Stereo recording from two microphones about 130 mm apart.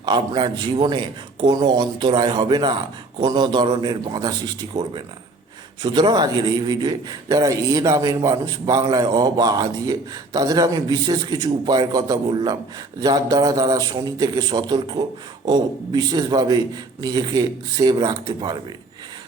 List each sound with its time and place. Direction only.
0.0 s a man's voice: 35° right (ahead or behind)